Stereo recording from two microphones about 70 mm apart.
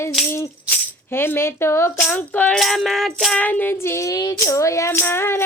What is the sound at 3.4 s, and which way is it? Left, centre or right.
Child singing, left.